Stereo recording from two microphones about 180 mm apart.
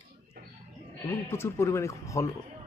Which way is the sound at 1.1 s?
15° left (ahead or behind).